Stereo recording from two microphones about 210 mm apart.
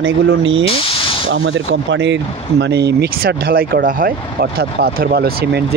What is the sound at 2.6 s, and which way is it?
Speech, 50° right (ahead or behind).